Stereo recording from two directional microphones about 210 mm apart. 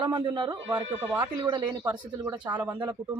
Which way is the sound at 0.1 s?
20° right (ahead or behind).